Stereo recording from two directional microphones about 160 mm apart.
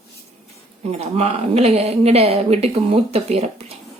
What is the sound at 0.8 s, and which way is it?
Speech, 40° right (ahead or behind).